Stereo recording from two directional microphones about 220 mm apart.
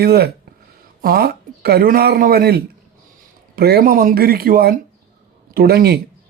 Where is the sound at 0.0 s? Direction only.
45° right (ahead or behind).